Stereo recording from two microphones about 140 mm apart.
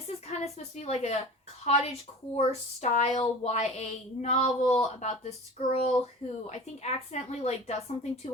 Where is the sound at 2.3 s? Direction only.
50° left (ahead or behind).